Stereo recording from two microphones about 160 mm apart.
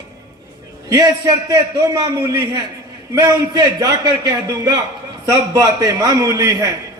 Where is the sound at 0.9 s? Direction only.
20° right (ahead or behind).